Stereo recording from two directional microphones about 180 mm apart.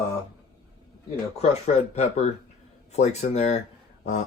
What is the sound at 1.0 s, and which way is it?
Speech, 35° left (ahead or behind).